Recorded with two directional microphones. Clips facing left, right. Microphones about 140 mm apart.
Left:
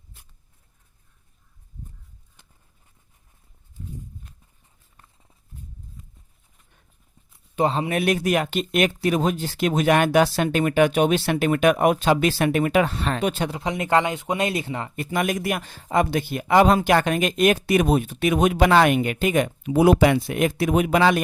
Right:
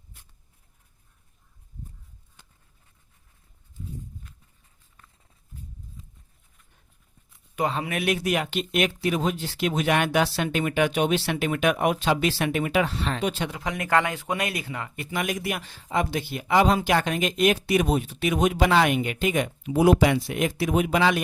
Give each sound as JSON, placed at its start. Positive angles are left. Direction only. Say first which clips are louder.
{"t": 7.5, "sound": "speech", "louder": "left 5 dB", "side_deg": 30}
{"t": 13.5, "sound": "speech", "louder": "left 3 dB", "side_deg": 25}
{"t": 15.1, "sound": "speech", "louder": "left 4 dB", "side_deg": 45}